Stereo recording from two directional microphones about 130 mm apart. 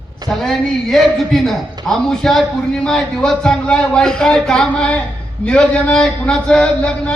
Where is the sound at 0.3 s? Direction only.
5° left (ahead or behind).